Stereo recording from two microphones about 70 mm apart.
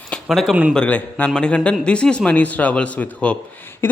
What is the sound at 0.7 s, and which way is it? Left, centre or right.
A man's voice, centre.